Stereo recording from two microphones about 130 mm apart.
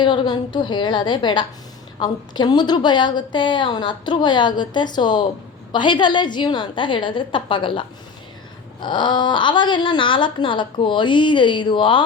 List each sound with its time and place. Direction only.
0.0 s a woman's voice: 35° left (ahead or behind)